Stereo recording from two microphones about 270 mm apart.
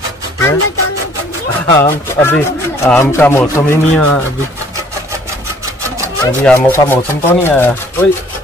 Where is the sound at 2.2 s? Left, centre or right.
Centre.